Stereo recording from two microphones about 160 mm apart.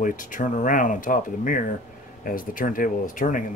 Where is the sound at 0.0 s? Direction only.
55° left (ahead or behind).